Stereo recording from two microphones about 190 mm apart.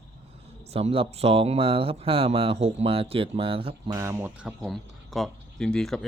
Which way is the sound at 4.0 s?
10° right (ahead or behind).